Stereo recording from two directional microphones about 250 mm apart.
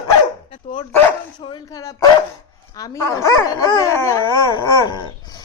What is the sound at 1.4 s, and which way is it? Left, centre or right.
Speech, centre.